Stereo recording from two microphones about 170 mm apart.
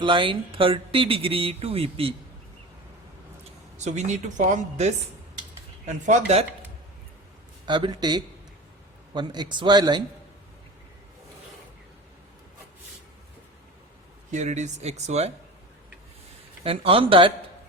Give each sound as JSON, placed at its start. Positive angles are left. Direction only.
{"t": 0.0, "sound": "speech", "side_deg": -30}
{"t": 3.8, "sound": "a woman's voice", "side_deg": -45}
{"t": 7.7, "sound": "speech", "side_deg": -25}
{"t": 14.3, "sound": "speech", "side_deg": -45}
{"t": 16.6, "sound": "speech", "side_deg": -35}